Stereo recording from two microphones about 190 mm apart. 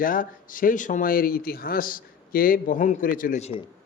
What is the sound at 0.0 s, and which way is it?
A man's voice, 45° left (ahead or behind).